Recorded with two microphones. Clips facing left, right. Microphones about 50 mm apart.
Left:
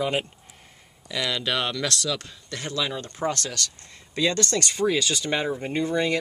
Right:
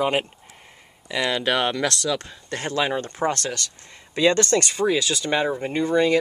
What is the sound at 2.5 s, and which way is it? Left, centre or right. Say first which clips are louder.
Speech: right 5 dB; right.